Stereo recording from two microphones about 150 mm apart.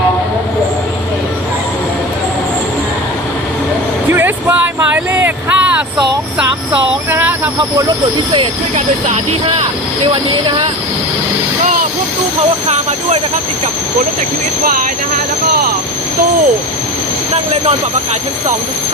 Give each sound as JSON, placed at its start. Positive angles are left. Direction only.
{"t": 4.1, "sound": "vehicle", "side_deg": -15}
{"t": 7.1, "sound": "snake", "side_deg": -10}
{"t": 9.0, "sound": "speech", "side_deg": -45}